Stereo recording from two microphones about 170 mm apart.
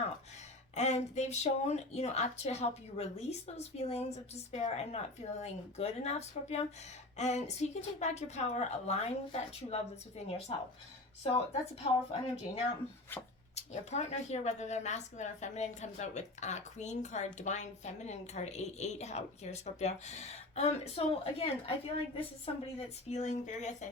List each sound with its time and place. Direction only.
0.8 s speech: 40° left (ahead or behind)
13.6 s speech: 40° left (ahead or behind)